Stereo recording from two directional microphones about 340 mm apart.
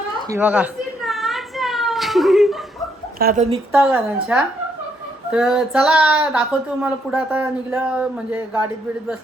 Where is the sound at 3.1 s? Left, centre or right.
Right.